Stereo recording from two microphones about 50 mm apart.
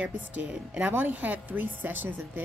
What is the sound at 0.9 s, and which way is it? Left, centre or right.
A woman's voice, right.